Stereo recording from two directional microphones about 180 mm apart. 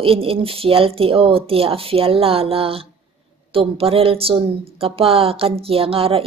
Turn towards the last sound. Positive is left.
turn(degrees=-30)  # may be behind; listen again after turning